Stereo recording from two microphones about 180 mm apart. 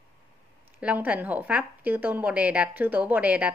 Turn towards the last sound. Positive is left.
turn(degrees=-10)  # may be behind; listen again after turning